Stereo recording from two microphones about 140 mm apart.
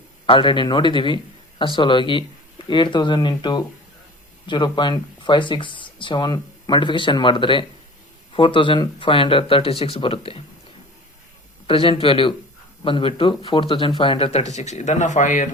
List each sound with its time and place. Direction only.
0.3 s speech: 35° left (ahead or behind)
11.6 s speech: 40° left (ahead or behind); by 15.4 s 65° left (ahead or behind)